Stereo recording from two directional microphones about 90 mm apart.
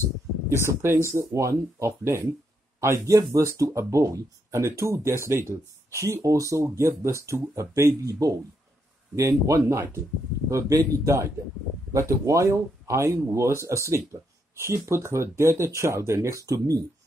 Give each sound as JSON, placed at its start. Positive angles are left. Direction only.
{"t": 0.0, "sound": "speech", "side_deg": -30}